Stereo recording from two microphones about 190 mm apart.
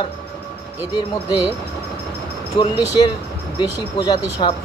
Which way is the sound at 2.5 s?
25° left (ahead or behind).